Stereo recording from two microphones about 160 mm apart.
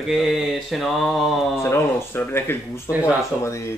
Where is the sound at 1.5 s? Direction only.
15° left (ahead or behind).